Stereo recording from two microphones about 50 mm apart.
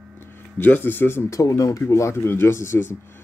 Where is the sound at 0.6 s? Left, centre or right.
Left.